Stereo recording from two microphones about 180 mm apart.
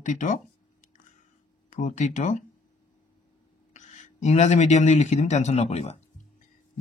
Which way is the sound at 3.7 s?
40° left (ahead or behind).